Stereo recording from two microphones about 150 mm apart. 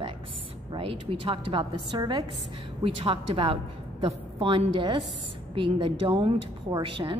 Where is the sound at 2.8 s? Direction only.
40° right (ahead or behind).